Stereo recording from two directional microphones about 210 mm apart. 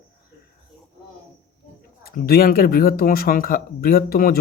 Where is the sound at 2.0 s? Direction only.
45° left (ahead or behind).